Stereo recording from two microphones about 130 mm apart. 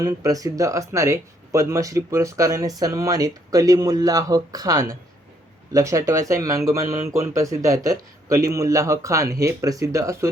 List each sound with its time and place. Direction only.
0.0 s speech: 25° right (ahead or behind)